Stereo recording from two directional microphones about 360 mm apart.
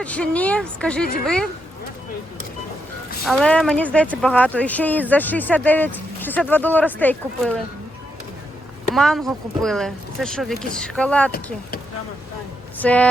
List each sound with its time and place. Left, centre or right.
0.0 s speech: centre
3.2 s speech: centre
9.0 s speech: centre
12.8 s speech: centre